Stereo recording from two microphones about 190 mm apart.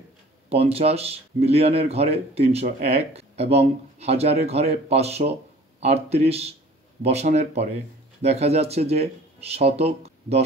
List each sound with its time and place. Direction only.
0.5 s speech: 30° right (ahead or behind)